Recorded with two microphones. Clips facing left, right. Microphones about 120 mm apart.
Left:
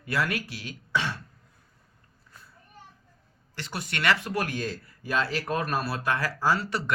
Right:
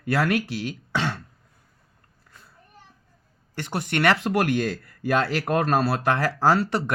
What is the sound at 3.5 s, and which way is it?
Speech, 55° right (ahead or behind).